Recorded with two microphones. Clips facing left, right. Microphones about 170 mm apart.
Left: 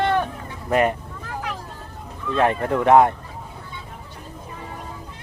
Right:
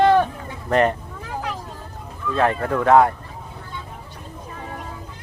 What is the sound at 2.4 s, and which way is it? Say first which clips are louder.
Speech: even; 20° left (ahead or behind).